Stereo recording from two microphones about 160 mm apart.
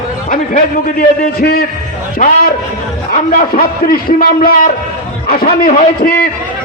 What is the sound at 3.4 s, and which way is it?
A man's voice, 65° left (ahead or behind).